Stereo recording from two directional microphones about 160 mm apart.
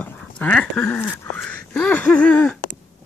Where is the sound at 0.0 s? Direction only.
10° left (ahead or behind).